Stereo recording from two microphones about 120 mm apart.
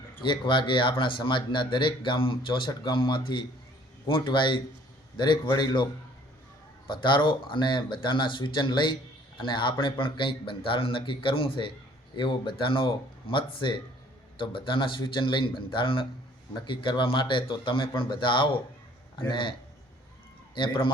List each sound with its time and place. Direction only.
0.2 s speech: 40° left (ahead or behind)
20.6 s speech: 45° left (ahead or behind)